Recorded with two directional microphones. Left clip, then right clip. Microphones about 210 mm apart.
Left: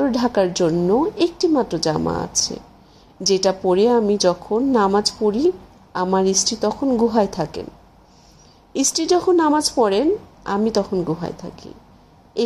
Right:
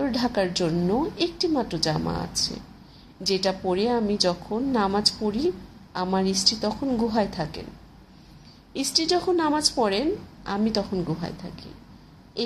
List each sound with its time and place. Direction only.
0.1 s a woman's voice: 30° left (ahead or behind)
8.7 s a woman's voice: 35° left (ahead or behind)